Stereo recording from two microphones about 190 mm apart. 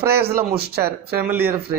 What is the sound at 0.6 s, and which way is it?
Speech, 55° right (ahead or behind).